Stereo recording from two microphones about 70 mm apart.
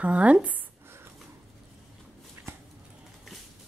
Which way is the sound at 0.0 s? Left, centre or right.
Centre.